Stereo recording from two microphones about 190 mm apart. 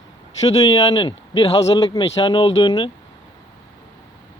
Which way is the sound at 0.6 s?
20° left (ahead or behind).